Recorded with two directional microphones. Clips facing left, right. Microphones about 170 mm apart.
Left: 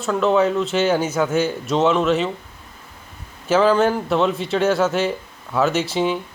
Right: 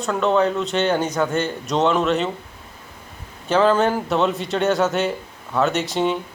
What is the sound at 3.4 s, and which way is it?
A man's voice, centre (ahead or behind).